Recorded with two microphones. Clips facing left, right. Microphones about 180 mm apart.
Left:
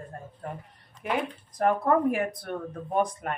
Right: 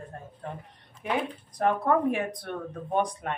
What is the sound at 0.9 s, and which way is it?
Speech, centre (ahead or behind).